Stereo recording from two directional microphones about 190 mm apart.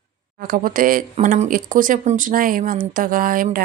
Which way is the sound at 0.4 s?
45° right (ahead or behind).